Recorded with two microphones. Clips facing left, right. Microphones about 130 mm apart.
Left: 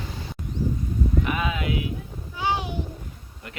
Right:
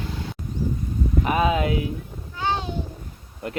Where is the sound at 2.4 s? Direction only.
15° left (ahead or behind).